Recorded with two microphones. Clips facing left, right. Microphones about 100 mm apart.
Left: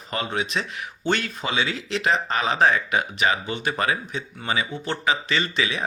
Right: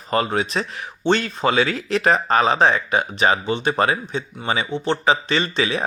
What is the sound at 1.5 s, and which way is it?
Speech, 45° right (ahead or behind).